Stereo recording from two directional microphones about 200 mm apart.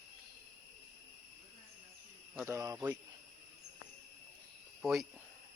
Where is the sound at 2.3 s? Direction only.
10° right (ahead or behind).